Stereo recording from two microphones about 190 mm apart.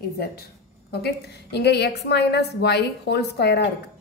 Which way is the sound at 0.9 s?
60° left (ahead or behind).